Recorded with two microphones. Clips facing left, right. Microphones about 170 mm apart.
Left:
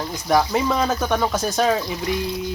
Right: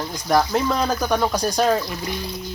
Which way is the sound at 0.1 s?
5° left (ahead or behind).